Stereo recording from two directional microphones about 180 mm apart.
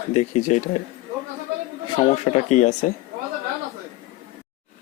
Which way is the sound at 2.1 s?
40° left (ahead or behind).